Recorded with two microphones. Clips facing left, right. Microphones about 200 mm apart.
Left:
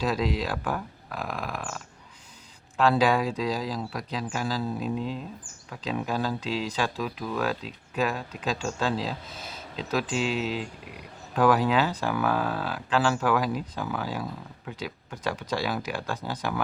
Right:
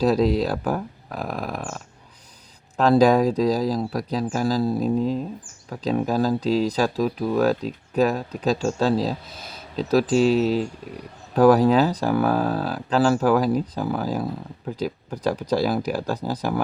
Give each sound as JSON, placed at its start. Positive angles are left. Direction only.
{"t": 0.0, "sound": "speech", "side_deg": -40}